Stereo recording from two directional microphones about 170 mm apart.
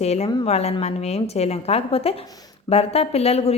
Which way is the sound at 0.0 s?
40° left (ahead or behind).